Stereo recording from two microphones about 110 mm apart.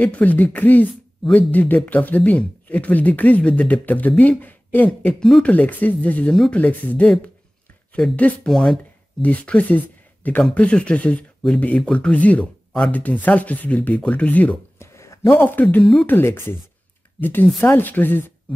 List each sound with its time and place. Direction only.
0.0 s speech: 15° left (ahead or behind)
1.2 s speech: 5° left (ahead or behind)
1.5 s speech: 15° left (ahead or behind)
14.9 s a sound: 25° left (ahead or behind)
15.6 s speech: 10° left (ahead or behind)
16.1 s speech: 20° left (ahead or behind)